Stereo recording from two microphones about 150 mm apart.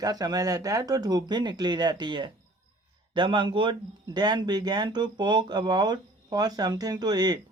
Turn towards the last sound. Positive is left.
turn(degrees=-25)  # may be behind; listen again after turning